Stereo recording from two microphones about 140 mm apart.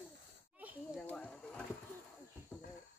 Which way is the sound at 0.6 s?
10° right (ahead or behind).